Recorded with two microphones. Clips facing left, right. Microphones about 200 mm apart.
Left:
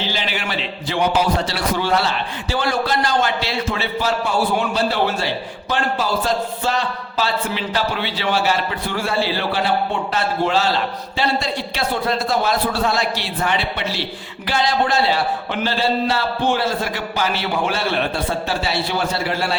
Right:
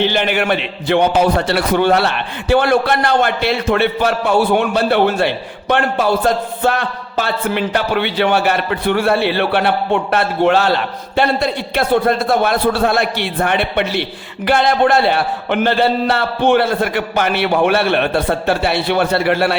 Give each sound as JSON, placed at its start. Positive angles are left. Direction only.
{"t": 0.0, "sound": "a man's voice", "side_deg": -60}